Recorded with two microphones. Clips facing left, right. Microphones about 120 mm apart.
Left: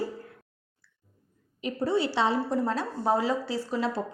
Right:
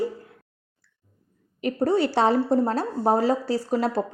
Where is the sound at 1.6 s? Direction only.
55° right (ahead or behind).